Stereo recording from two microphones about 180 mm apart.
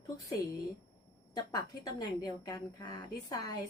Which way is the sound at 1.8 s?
20° left (ahead or behind).